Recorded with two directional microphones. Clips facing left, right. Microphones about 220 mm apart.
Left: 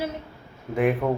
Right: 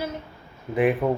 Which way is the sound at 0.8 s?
5° right (ahead or behind).